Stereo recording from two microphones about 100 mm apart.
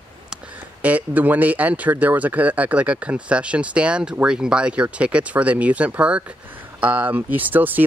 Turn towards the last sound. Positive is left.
turn(degrees=-20)  # may be behind; listen again after turning